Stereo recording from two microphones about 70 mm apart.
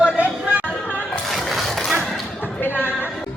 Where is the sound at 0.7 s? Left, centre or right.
Left.